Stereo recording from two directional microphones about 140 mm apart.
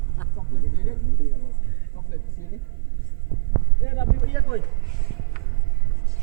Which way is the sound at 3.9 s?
30° left (ahead or behind).